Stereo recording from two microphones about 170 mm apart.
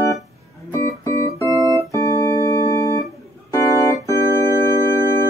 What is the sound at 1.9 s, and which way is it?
Keyboard, 20° left (ahead or behind).